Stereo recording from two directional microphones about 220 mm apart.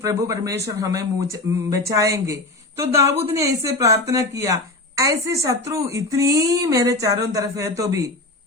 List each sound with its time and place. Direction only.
0.0 s speech: 15° right (ahead or behind)